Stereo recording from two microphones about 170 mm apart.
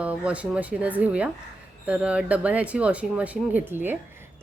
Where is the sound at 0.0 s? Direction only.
5° right (ahead or behind).